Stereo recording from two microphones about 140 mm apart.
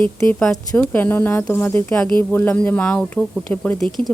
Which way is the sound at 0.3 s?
5° left (ahead or behind).